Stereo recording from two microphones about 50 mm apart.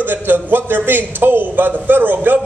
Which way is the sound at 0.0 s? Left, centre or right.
Right.